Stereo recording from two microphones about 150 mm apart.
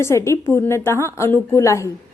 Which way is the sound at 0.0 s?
20° left (ahead or behind).